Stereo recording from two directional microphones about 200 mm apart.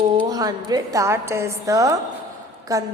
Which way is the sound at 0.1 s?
20° right (ahead or behind).